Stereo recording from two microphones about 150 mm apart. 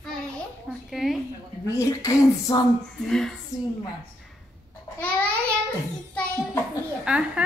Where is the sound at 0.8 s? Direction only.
Centre (ahead or behind).